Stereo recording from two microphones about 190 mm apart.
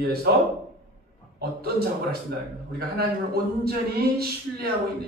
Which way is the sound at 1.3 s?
55° right (ahead or behind).